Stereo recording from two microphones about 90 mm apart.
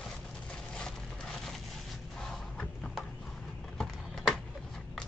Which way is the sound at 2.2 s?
10° left (ahead or behind).